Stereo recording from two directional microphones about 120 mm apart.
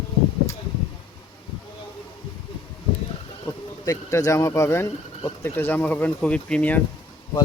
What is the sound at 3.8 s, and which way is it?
Speech, 30° left (ahead or behind).